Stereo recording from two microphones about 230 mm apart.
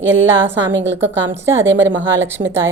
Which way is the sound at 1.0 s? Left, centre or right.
Centre.